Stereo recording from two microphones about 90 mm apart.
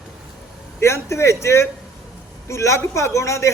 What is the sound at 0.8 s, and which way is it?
A man's voice, 30° left (ahead or behind).